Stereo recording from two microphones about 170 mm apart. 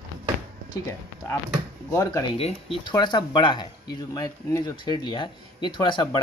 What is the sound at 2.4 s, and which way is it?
Speech, 35° left (ahead or behind).